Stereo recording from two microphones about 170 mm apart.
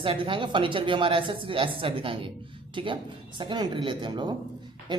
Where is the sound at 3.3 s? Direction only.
25° right (ahead or behind).